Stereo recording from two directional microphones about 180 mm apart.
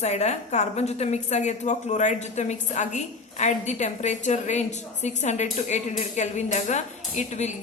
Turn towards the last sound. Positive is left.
turn(degrees=40)  # may be behind; listen again after turning